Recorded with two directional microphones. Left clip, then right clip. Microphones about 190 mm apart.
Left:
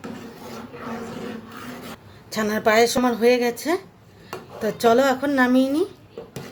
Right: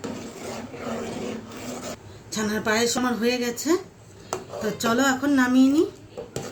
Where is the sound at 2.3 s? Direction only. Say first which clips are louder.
Left 6 dB; 50° left (ahead or behind).